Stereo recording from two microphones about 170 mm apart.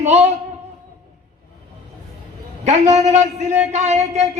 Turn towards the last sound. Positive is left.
turn(degrees=-40)  # may be behind; listen again after turning